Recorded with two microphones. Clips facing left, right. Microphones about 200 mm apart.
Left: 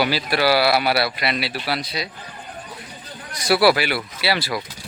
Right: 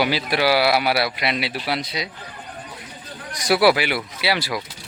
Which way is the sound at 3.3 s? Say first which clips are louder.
Even; 15° right (ahead or behind).